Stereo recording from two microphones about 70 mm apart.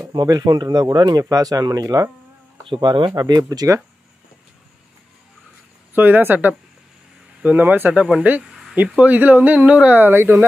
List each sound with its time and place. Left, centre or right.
0.1 s speech: right
3.2 s speech: right
5.9 s speech: right
8.5 s a sound: centre
8.8 s speech: centre